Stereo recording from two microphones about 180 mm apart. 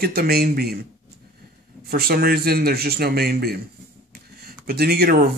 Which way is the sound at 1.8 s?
60° right (ahead or behind).